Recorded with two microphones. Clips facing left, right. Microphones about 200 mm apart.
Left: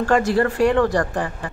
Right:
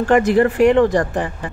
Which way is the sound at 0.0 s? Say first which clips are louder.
Right 4 dB; 20° right (ahead or behind).